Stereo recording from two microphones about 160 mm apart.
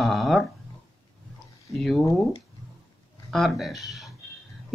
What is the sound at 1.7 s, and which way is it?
Speech, centre (ahead or behind).